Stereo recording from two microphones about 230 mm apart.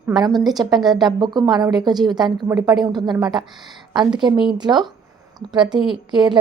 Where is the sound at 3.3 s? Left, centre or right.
Centre.